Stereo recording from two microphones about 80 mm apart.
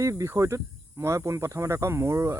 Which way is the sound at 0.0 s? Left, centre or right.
Right.